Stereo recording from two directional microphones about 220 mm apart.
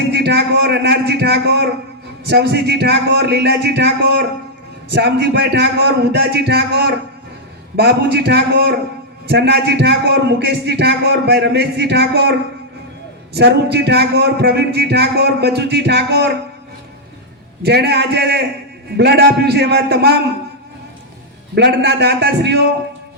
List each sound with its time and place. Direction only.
0.1 s a man's voice: 50° right (ahead or behind)
17.6 s a man's voice: 50° right (ahead or behind)
21.5 s a man's voice: 50° right (ahead or behind)